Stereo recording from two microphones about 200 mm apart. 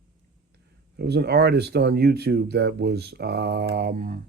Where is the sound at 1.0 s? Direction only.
55° right (ahead or behind).